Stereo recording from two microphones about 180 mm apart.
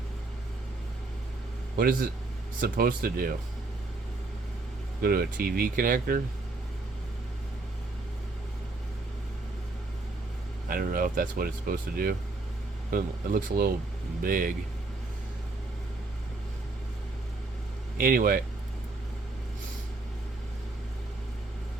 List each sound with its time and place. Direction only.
1.7 s speech: 55° right (ahead or behind)
5.0 s speech: 55° right (ahead or behind)
10.7 s speech: 50° right (ahead or behind)
17.9 s speech: 55° right (ahead or behind)